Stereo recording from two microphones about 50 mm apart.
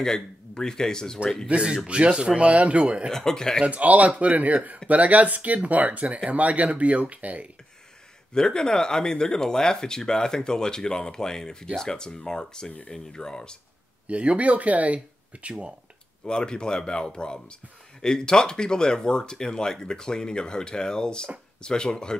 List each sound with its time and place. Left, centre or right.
0.0 s speech: centre
1.5 s speech: right
3.1 s speech: centre
3.6 s speech: right
8.4 s speech: centre
14.0 s speech: right
16.3 s speech: centre